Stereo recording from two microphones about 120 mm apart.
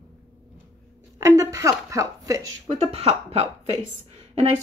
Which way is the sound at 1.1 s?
30° right (ahead or behind).